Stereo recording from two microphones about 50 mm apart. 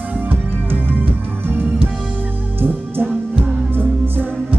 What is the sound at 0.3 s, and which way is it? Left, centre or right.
Music, right.